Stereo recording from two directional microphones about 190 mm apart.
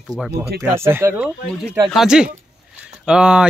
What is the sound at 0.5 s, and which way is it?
Speech, 15° right (ahead or behind).